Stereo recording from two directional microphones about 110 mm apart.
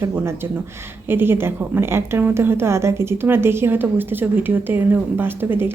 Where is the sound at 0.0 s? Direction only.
25° right (ahead or behind).